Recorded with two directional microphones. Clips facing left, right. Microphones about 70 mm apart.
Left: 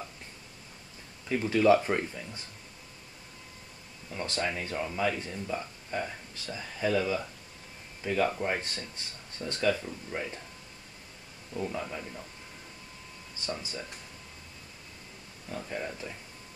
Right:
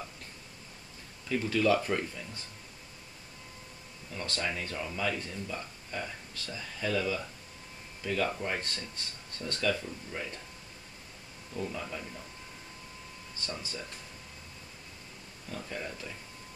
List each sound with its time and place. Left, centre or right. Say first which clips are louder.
1.3 s speech: left 4 dB; left
4.1 s speech: left 3 dB; centre
11.5 s speech: left 2 dB; centre
13.5 s speech: left 4 dB; left
15.5 s speech: left 3 dB; centre